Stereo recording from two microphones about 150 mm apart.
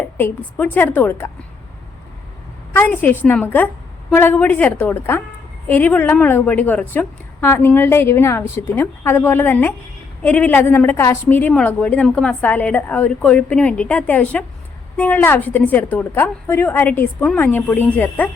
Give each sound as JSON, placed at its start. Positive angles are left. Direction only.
{"t": 0.2, "sound": "a woman's voice", "side_deg": 10}
{"t": 2.7, "sound": "a woman's voice", "side_deg": 10}